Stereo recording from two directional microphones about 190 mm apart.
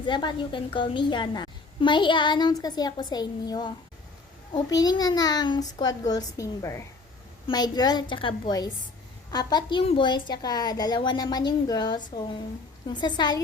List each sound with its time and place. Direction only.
0.0 s a woman's voice: 25° left (ahead or behind)